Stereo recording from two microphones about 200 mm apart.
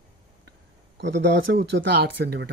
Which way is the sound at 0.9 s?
65° right (ahead or behind).